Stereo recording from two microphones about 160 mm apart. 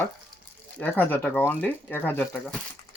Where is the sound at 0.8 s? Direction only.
10° left (ahead or behind).